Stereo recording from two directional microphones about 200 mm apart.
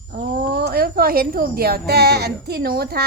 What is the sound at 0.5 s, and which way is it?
A woman's voice, 50° right (ahead or behind).